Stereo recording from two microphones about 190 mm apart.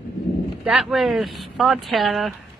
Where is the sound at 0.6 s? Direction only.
5° right (ahead or behind).